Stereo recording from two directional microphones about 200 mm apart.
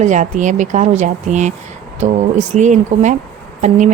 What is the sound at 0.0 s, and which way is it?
Speech, 40° right (ahead or behind).